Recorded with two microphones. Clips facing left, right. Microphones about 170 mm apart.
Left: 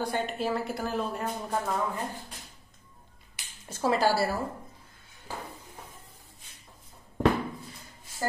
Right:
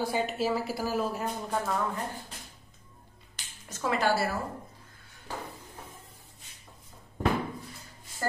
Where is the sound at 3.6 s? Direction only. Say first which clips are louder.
Left 3 dB; 30° left (ahead or behind).